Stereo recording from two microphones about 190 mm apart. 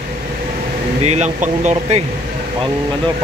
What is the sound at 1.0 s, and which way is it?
Speech, 35° right (ahead or behind).